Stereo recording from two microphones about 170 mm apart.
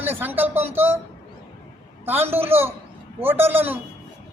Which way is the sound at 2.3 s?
15° right (ahead or behind).